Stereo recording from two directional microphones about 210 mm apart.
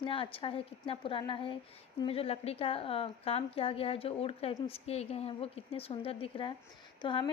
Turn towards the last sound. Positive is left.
turn(degrees=20)  # may be behind; listen again after turning